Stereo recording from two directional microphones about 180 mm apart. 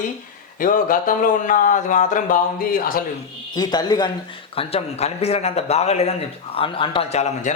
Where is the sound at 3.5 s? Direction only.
20° left (ahead or behind).